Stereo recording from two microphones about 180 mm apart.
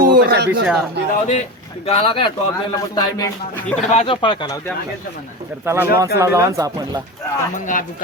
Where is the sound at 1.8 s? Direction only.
30° left (ahead or behind).